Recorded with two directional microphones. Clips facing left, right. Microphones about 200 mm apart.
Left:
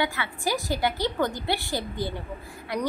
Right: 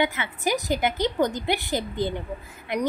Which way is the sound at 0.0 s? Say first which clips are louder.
Right 3 dB; 20° right (ahead or behind).